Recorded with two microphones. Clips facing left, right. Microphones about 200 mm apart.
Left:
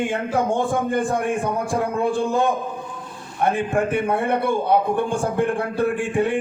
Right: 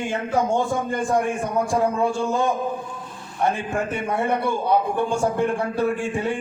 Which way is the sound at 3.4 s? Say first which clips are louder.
Left 3 dB; 55° left (ahead or behind).